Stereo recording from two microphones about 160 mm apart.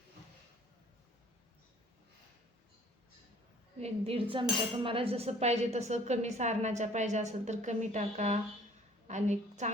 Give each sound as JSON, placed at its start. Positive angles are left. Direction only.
{"t": 3.8, "sound": "a woman's voice", "side_deg": -40}